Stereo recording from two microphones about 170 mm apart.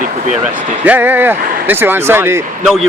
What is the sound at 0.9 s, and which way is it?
Speech, 10° right (ahead or behind).